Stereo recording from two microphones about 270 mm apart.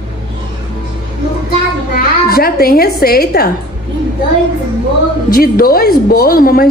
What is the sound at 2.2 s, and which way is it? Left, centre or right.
A woman's voice, left.